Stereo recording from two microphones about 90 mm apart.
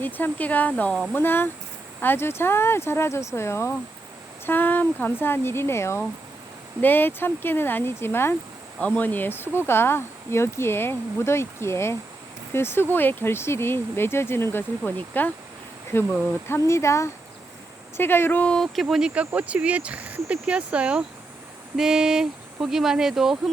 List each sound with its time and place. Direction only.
0.0 s speech: 20° left (ahead or behind)
18.5 s speech: centre (ahead or behind)